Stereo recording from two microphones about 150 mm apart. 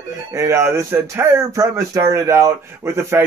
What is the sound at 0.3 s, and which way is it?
A man's voice, 20° right (ahead or behind).